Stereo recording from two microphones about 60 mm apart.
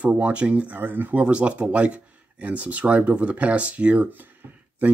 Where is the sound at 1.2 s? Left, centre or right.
Centre.